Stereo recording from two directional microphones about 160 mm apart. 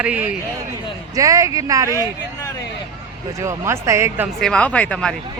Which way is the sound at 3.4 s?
20° right (ahead or behind).